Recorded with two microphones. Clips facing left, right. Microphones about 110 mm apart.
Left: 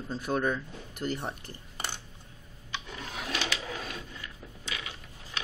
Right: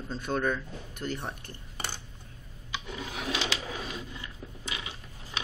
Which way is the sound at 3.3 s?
25° right (ahead or behind).